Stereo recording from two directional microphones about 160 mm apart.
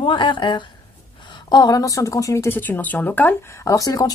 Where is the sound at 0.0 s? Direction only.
30° left (ahead or behind).